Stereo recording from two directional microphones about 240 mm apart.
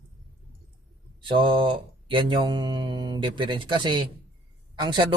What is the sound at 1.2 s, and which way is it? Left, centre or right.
Speech, right.